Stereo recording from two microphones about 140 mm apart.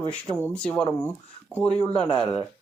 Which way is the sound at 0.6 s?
10° left (ahead or behind).